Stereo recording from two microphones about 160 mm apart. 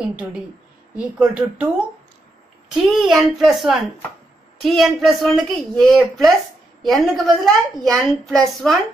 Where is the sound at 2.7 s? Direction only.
Centre (ahead or behind).